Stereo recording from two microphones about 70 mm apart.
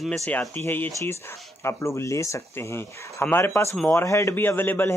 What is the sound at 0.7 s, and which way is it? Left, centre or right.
Speech, left.